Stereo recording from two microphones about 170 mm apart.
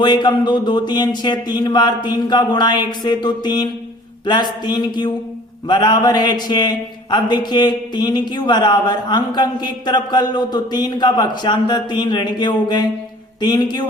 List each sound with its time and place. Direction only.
0.0 s speech: 25° left (ahead or behind)